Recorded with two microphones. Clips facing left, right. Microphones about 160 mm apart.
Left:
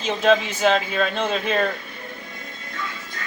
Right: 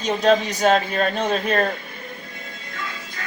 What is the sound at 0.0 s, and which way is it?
Speech, 40° right (ahead or behind).